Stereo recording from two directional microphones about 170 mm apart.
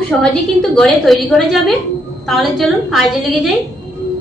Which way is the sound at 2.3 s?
Centre (ahead or behind).